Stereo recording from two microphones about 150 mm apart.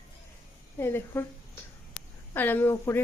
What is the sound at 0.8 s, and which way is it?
Speech, 15° left (ahead or behind).